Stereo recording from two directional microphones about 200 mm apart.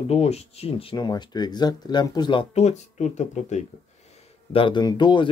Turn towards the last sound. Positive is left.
turn(degrees=20)  # may be behind; listen again after turning